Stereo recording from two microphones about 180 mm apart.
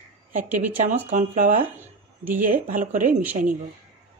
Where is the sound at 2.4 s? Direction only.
50° right (ahead or behind).